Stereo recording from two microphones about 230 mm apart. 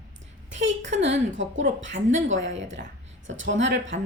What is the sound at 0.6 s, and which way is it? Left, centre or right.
A woman's voice, right.